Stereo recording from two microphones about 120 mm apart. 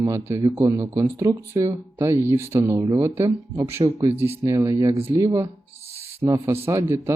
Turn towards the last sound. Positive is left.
turn(degrees=-20)  # may be behind; listen again after turning